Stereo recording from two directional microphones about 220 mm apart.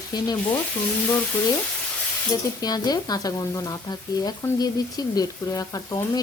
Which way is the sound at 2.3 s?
15° left (ahead or behind).